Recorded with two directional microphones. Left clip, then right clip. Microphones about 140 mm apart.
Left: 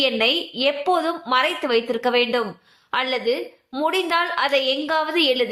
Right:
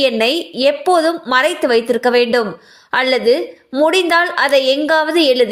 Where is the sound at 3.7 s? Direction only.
45° right (ahead or behind).